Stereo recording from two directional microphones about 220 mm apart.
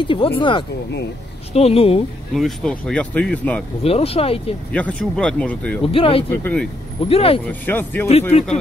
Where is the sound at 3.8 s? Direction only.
25° left (ahead or behind).